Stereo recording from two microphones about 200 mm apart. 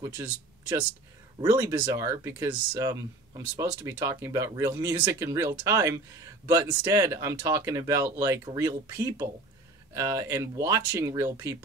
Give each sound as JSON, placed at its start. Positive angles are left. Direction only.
{"t": 0.0, "sound": "speech", "side_deg": -20}